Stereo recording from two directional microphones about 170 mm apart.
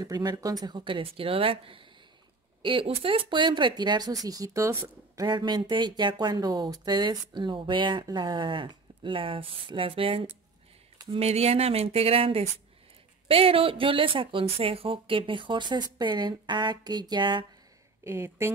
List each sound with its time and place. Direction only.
0.0 s speech: 25° right (ahead or behind)
18.0 s speech: 15° right (ahead or behind)